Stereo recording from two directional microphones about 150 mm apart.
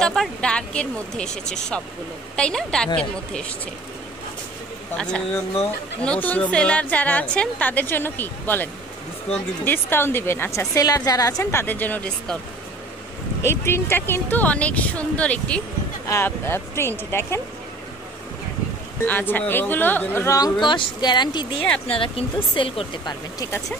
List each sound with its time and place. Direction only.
0.0 s speech: 5° left (ahead or behind)
4.9 s a woman's voice: 5° left (ahead or behind)
9.7 s a woman's voice: 15° left (ahead or behind)
13.4 s a woman's voice: 15° left (ahead or behind)
19.0 s a woman's voice: 10° left (ahead or behind); by 21.6 s 30° left (ahead or behind)
21.6 s a woman's voice: 10° left (ahead or behind)
21.9 s speech: 35° left (ahead or behind)